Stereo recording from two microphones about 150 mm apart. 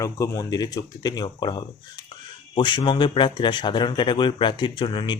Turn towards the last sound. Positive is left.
turn(degrees=30)  # may be behind; listen again after turning